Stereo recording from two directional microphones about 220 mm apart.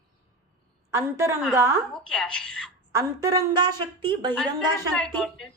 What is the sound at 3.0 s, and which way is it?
Speech, 15° right (ahead or behind).